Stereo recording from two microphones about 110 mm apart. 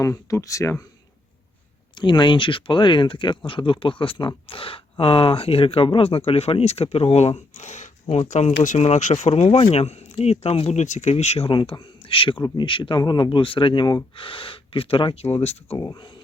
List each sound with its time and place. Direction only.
0.0 s speech: 25° left (ahead or behind)
2.0 s speech: 45° left (ahead or behind); by 15.8 s 65° left (ahead or behind)
15.8 s speech: 45° left (ahead or behind)